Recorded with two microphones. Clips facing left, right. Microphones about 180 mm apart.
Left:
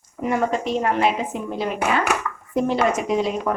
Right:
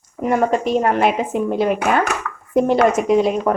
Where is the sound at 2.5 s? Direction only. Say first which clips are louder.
Right 6 dB; 50° right (ahead or behind).